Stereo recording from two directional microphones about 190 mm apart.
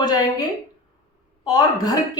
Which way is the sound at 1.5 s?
20° left (ahead or behind).